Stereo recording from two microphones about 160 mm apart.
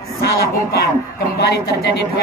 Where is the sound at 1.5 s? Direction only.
90° left.